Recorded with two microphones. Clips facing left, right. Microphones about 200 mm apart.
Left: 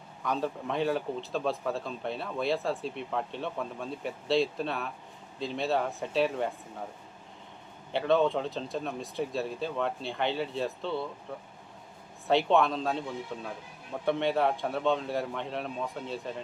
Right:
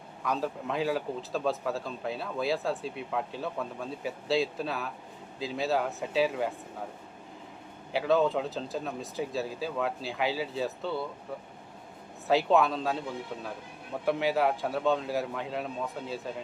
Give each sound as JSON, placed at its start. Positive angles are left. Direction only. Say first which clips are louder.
{"t": 0.3, "sound": "speech", "louder": "even", "side_deg": 0}
{"t": 7.9, "sound": "speech", "louder": "even", "side_deg": -5}
{"t": 12.3, "sound": "speech", "louder": "even", "side_deg": -5}
{"t": 14.0, "sound": "speech", "louder": "even", "side_deg": -5}